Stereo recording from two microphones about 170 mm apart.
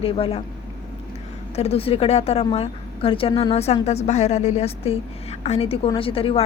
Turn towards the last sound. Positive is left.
turn(degrees=35)  # may be behind; listen again after turning